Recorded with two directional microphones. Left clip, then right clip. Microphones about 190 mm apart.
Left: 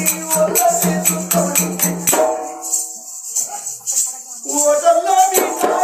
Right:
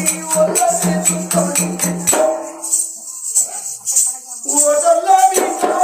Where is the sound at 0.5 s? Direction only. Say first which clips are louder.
Even; centre (ahead or behind).